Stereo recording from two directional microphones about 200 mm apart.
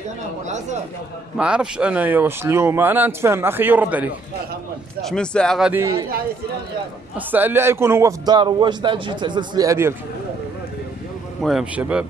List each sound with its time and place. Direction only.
1.4 s a man's voice: 5° right (ahead or behind)
5.0 s a man's voice: 5° left (ahead or behind)
5.7 s a man's voice: 15° right (ahead or behind)
7.2 s a man's voice: 10° right (ahead or behind)
11.4 s a man's voice: 5° right (ahead or behind)